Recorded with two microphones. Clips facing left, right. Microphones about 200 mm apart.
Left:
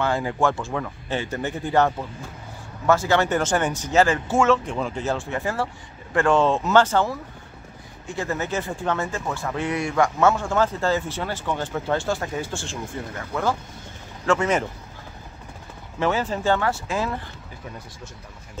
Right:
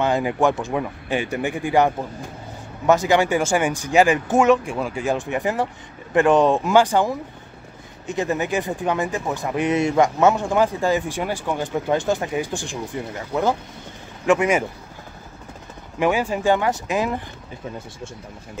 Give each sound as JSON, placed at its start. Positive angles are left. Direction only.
{"t": 0.0, "sound": "speech", "side_deg": -20}
{"t": 16.0, "sound": "speech", "side_deg": -15}